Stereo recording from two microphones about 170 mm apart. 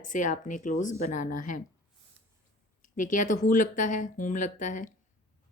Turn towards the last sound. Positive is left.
turn(degrees=50)  # may be behind; listen again after turning